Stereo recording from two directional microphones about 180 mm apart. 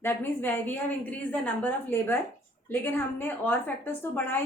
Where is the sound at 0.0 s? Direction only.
10° left (ahead or behind).